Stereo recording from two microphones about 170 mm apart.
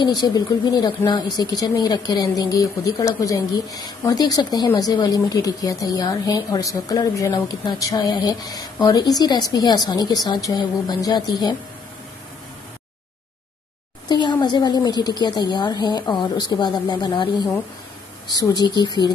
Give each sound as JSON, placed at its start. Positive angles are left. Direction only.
{"t": 0.0, "sound": "speech", "side_deg": 25}
{"t": 14.0, "sound": "speech", "side_deg": 25}